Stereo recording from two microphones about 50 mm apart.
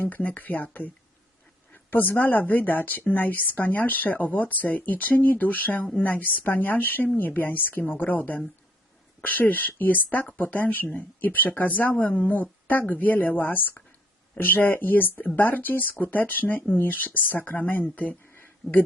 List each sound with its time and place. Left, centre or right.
0.0 s a woman's voice: left